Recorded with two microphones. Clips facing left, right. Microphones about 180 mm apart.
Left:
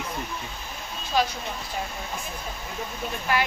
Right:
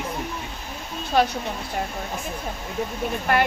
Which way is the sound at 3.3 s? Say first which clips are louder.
Right 4 dB; 55° right (ahead or behind).